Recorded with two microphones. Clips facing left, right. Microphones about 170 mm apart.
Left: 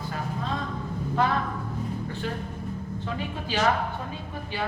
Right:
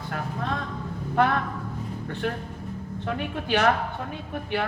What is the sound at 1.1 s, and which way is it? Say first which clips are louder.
A woman's voice: right 3 dB; 60° right (ahead or behind).